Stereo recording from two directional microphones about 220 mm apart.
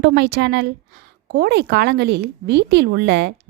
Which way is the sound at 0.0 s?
50° right (ahead or behind).